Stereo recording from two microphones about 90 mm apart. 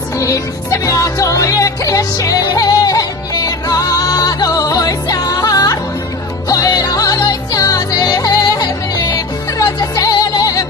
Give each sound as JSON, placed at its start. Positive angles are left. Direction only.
{"t": 0.2, "sound": "music", "side_deg": 35}